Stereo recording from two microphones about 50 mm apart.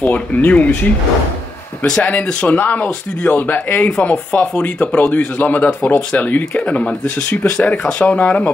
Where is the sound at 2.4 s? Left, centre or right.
Left.